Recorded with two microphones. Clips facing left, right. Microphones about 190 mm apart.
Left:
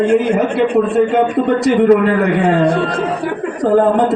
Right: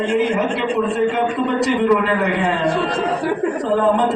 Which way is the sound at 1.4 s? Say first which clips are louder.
Left 5 dB; 50° left (ahead or behind).